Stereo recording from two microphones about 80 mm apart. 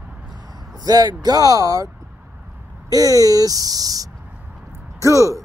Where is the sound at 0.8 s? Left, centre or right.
Right.